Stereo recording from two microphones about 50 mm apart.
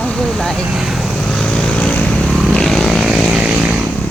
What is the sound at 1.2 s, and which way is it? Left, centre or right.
Vehicle, centre.